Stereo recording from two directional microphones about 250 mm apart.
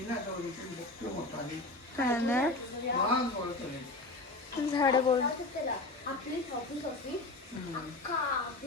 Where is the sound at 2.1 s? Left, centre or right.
Centre.